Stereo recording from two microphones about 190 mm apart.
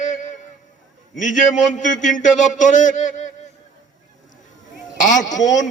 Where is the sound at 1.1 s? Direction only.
40° left (ahead or behind).